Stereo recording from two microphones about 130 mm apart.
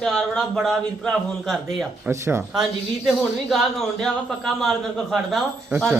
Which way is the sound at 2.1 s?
20° right (ahead or behind).